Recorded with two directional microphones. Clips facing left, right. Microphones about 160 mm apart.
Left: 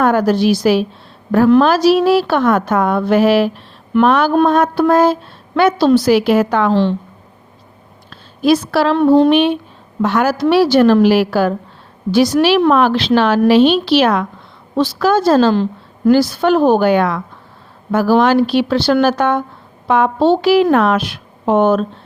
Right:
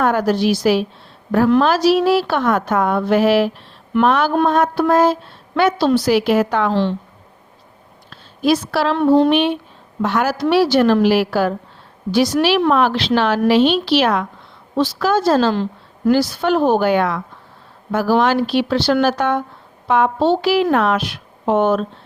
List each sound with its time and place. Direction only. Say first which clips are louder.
0.0 s a woman's voice: left 3 dB; 50° left (ahead or behind)
8.4 s a woman's voice: left 4 dB; 45° left (ahead or behind)